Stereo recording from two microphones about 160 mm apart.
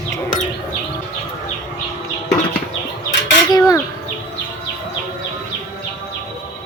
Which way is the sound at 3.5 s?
25° left (ahead or behind).